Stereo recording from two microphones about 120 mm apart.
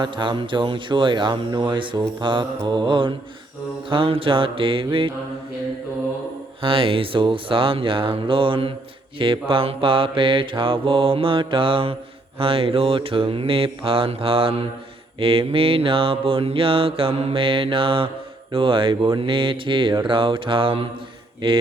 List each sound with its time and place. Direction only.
0.0 s mantra: 40° right (ahead or behind)
6.6 s mantra: 50° right (ahead or behind)